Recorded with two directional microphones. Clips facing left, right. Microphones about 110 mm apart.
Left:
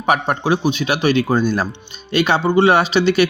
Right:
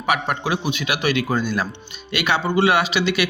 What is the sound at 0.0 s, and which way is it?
Speech, 30° left (ahead or behind).